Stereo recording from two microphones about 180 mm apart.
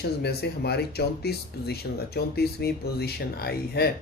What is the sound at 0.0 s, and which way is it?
Speech, 65° left (ahead or behind).